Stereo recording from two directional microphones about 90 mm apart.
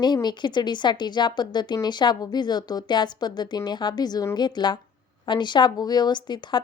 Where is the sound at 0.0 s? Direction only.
55° left (ahead or behind).